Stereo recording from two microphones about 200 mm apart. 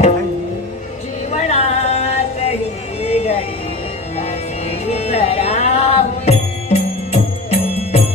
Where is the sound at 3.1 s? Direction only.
30° left (ahead or behind).